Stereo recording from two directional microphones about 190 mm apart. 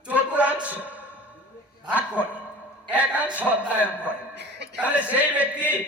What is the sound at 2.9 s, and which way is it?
Music, 5° right (ahead or behind).